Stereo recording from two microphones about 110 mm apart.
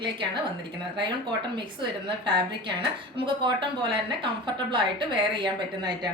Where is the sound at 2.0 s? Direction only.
45° right (ahead or behind).